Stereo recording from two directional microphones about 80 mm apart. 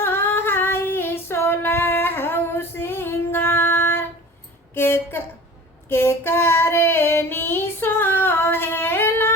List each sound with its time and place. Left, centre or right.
0.0 s female singing: left
4.7 s a sound: left
5.9 s child singing: left